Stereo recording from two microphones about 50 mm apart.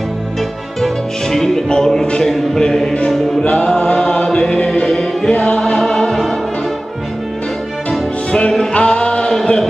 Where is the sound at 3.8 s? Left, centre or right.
Centre.